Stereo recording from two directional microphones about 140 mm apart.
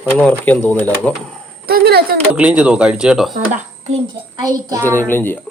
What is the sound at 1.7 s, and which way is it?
Speech, 90° right.